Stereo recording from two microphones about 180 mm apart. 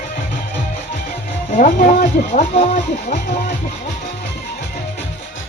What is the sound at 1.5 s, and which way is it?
Speech, 45° left (ahead or behind).